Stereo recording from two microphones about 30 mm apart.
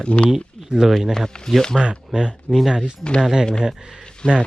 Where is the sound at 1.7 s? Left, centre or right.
Centre.